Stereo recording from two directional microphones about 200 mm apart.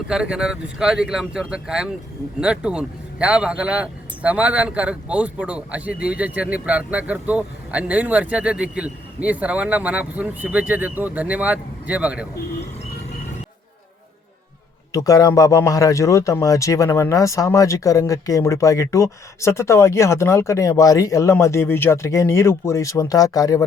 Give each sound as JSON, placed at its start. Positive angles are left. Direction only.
{"t": 0.1, "sound": "speech", "side_deg": -5}
{"t": 14.9, "sound": "speech", "side_deg": 20}